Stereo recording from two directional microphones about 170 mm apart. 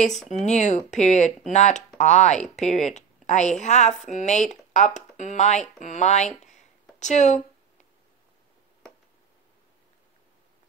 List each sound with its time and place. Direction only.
0.5 s a woman's voice: 45° left (ahead or behind)